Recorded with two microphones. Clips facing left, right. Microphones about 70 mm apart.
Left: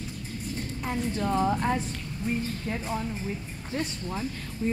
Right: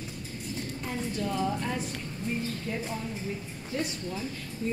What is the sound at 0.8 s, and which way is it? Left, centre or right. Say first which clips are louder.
Speech: left 4 dB; left.